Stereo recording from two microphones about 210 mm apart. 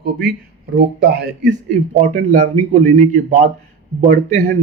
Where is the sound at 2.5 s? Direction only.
35° right (ahead or behind).